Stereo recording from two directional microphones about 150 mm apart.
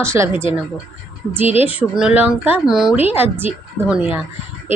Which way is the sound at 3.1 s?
15° right (ahead or behind).